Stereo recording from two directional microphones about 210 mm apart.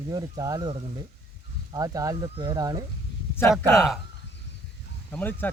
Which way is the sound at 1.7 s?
15° right (ahead or behind).